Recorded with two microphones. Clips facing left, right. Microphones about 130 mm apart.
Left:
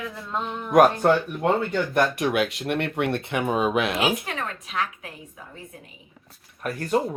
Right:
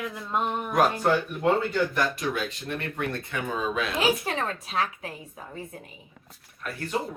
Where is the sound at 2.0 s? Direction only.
60° left (ahead or behind).